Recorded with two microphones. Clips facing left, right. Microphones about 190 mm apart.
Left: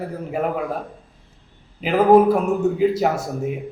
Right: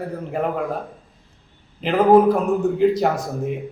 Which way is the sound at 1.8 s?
5° left (ahead or behind).